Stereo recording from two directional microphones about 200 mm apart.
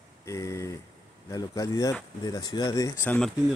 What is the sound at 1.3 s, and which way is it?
Speech, 20° left (ahead or behind).